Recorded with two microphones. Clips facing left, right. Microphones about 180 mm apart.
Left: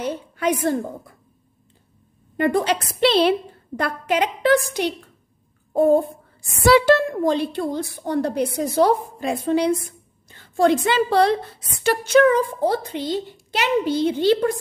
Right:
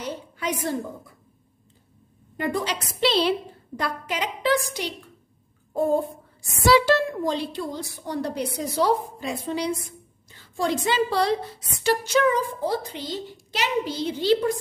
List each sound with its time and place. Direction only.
0.0 s a woman's voice: 55° left (ahead or behind)
2.3 s a woman's voice: 55° left (ahead or behind)
6.6 s a woman's voice: 55° left (ahead or behind)